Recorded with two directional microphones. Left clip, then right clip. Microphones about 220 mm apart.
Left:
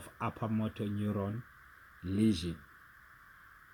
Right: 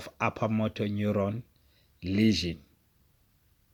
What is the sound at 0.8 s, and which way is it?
Speech, 60° right (ahead or behind).